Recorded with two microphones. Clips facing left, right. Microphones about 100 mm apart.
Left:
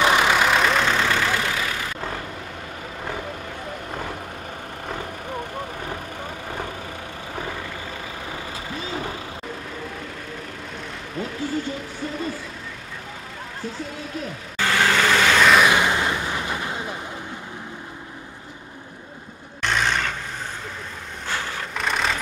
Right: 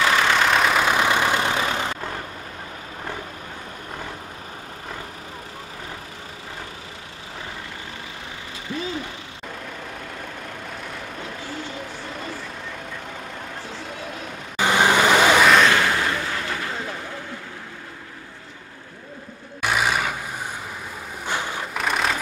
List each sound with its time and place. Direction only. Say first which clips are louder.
0.0 s vehicle: left 1 dB; 15° left (ahead or behind); by 1.9 s 25° right (ahead or behind)
14.6 s vehicle: right 2 dB; 20° right (ahead or behind)
15.6 s artillery fire: even; 15° left (ahead or behind)
19.6 s vehicle: right 1 dB; 10° right (ahead or behind)
21.3 s vehicle: right 2 dB; 15° right (ahead or behind)
21.7 s vehicle: right 1 dB; centre (ahead or behind)